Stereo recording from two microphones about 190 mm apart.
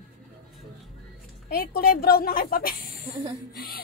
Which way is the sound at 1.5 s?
50° left (ahead or behind).